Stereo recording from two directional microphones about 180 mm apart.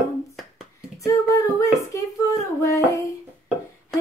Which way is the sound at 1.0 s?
20° left (ahead or behind).